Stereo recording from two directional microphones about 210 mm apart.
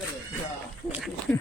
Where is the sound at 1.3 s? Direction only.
5° left (ahead or behind).